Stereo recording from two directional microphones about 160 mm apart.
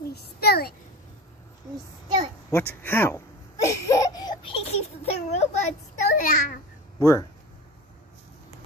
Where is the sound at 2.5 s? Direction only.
15° left (ahead or behind); by 4.8 s 40° left (ahead or behind).